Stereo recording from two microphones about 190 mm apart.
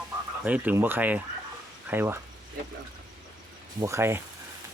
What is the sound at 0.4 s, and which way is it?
Speech, 10° right (ahead or behind).